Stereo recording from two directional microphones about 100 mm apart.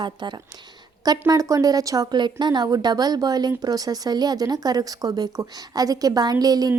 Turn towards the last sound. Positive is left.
turn(degrees=-40)  # may be behind; listen again after turning